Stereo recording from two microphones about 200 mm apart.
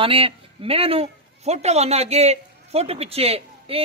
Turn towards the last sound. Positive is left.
turn(degrees=-30)  # may be behind; listen again after turning